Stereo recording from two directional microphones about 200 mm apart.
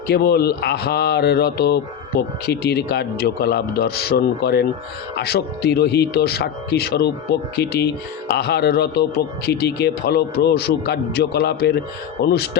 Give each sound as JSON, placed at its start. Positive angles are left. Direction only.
{"t": 0.1, "sound": "speech", "side_deg": 50}